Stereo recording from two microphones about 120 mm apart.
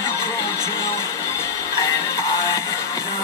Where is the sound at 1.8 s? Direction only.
30° left (ahead or behind).